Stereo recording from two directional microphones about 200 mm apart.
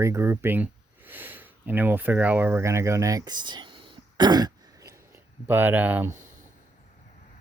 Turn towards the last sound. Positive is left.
turn(degrees=-40)  # may be behind; listen again after turning